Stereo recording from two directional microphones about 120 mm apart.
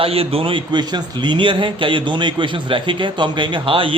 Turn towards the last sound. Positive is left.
turn(degrees=-50)  # may be behind; listen again after turning